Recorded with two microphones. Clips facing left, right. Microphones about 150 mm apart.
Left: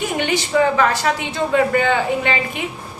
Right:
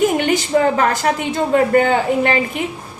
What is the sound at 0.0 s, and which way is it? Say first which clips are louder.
A woman's voice: right 5 dB; 45° right (ahead or behind).